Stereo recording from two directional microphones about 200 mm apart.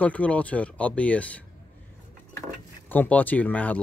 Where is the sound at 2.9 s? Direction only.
10° left (ahead or behind).